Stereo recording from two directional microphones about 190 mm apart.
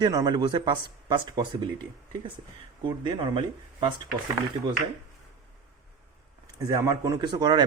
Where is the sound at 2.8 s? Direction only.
25° right (ahead or behind).